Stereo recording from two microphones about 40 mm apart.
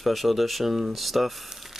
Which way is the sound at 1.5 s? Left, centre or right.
Centre.